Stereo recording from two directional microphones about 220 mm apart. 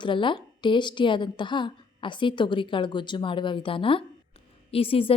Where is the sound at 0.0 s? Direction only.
20° left (ahead or behind).